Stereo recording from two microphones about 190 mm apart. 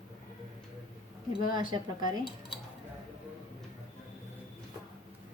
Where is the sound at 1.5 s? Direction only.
20° right (ahead or behind).